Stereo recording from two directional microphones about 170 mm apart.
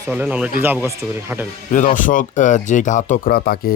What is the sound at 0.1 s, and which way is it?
Speech, 10° right (ahead or behind).